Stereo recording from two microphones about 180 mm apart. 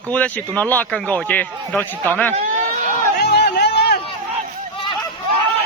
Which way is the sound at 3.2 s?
65° left (ahead or behind).